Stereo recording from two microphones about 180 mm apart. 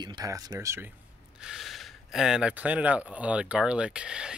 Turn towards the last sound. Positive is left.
turn(degrees=-5)  # may be behind; listen again after turning